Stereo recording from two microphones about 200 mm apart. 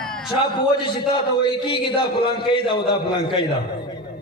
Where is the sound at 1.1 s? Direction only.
25° left (ahead or behind).